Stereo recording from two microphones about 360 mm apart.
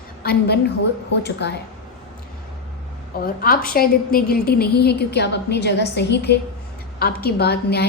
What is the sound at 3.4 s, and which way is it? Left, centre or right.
A woman's voice, left.